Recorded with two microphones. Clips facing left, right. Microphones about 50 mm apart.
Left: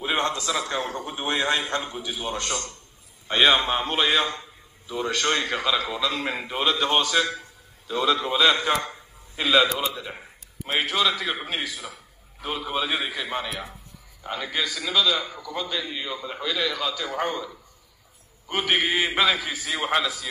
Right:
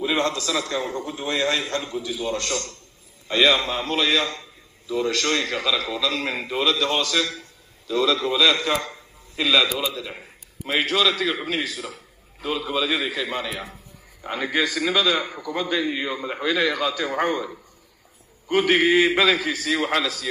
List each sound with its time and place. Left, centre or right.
0.0 s a man's voice: left
10.6 s a man's voice: right
14.2 s a man's voice: right
14.6 s a man's voice: right
18.5 s a man's voice: right